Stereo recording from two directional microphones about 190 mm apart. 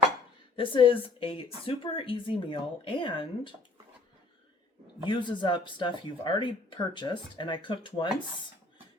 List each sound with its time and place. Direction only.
0.5 s speech: 25° left (ahead or behind)
5.0 s speech: 25° left (ahead or behind)